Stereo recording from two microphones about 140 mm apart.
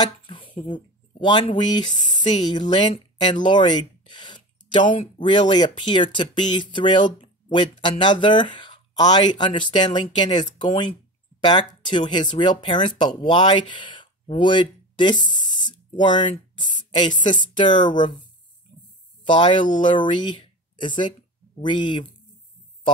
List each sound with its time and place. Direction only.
0.0 s a sound: 35° left (ahead or behind)
0.7 s speech: 35° left (ahead or behind)
2.5 s speech: 35° left (ahead or behind)
4.2 s a sound: 35° left (ahead or behind)
5.0 s speech: 35° left (ahead or behind)
19.2 s speech: 35° left (ahead or behind)